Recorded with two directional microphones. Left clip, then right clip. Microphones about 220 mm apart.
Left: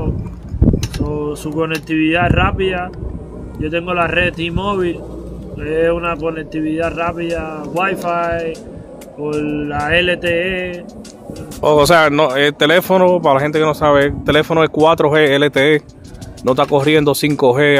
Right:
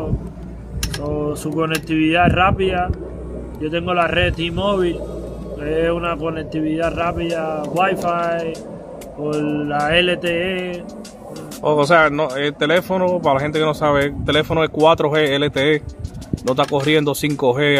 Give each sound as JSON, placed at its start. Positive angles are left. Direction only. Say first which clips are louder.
{"t": 1.1, "sound": "speech", "louder": "left 2 dB", "side_deg": 10}
{"t": 9.4, "sound": "speech", "louder": "right 1 dB", "side_deg": 10}
{"t": 11.6, "sound": "speech", "louder": "left 4 dB", "side_deg": 35}
{"t": 13.4, "sound": "speech", "louder": "left 4 dB", "side_deg": 20}